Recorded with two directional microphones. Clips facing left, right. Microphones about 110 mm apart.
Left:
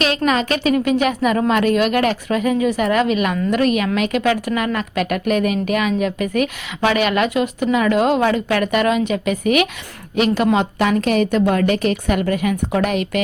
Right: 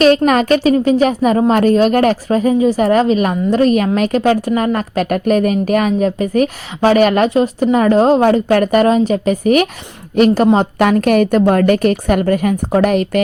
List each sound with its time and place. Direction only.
0.3 s a woman's voice: 45° right (ahead or behind)
10.8 s a woman's voice: 50° right (ahead or behind)